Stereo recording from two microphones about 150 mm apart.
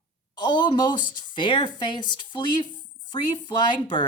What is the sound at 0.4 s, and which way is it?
Speech, 30° left (ahead or behind).